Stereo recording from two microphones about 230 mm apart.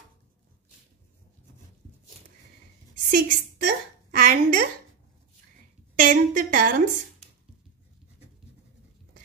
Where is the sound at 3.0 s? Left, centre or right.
Right.